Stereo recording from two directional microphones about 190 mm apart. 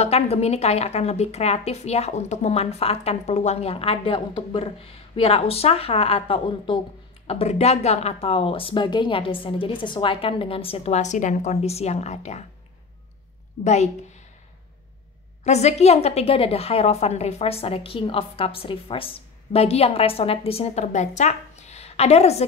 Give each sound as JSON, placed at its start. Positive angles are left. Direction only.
{"t": 0.0, "sound": "a woman's voice", "side_deg": 35}
{"t": 13.7, "sound": "a woman's voice", "side_deg": 35}
{"t": 15.4, "sound": "a woman's voice", "side_deg": 35}